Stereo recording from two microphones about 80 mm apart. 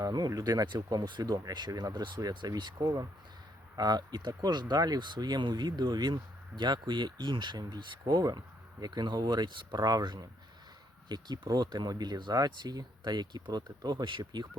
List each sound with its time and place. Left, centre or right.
0.0 s speech: right
2.7 s speech: right
3.8 s speech: right